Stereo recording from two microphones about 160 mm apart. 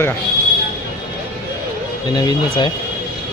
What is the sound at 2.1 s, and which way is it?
Speech, 30° left (ahead or behind).